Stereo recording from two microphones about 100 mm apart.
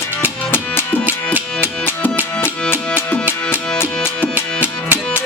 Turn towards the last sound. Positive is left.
turn(degrees=-15)  # may be behind; listen again after turning